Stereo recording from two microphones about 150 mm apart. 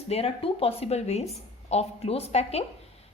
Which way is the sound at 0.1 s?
40° left (ahead or behind).